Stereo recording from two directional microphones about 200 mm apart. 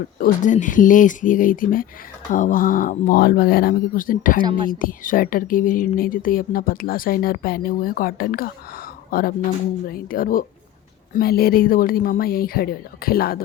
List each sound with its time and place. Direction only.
0.2 s speech: 40° left (ahead or behind)